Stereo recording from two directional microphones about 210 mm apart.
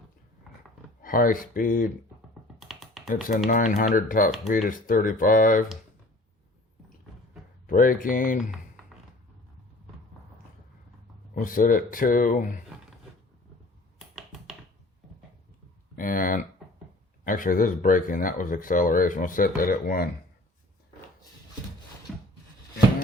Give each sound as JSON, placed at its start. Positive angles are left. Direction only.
{"t": 1.0, "sound": "speech", "side_deg": 40}
{"t": 2.6, "sound": "computer keyboard", "side_deg": 0}
{"t": 3.1, "sound": "speech", "side_deg": 40}
{"t": 7.7, "sound": "speech", "side_deg": 40}
{"t": 11.3, "sound": "speech", "side_deg": 40}
{"t": 14.2, "sound": "a sound", "side_deg": 0}
{"t": 16.0, "sound": "a sound", "side_deg": 40}
{"t": 17.2, "sound": "speech", "side_deg": 40}
{"t": 22.1, "sound": "wood", "side_deg": 0}